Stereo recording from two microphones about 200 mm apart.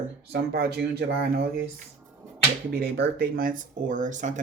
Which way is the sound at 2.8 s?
50° right (ahead or behind).